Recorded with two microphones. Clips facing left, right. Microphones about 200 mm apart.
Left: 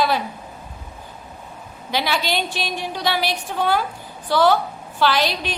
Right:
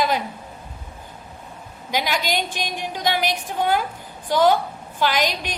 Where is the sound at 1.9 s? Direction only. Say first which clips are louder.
Left 1 dB; 15° right (ahead or behind).